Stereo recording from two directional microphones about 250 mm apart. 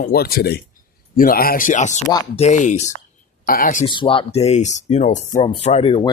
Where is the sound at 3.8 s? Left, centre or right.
Centre.